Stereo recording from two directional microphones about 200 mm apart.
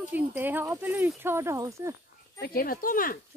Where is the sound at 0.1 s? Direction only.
10° right (ahead or behind).